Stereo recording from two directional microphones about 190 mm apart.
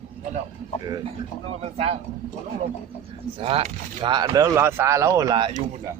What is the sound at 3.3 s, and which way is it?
Speech, 30° right (ahead or behind).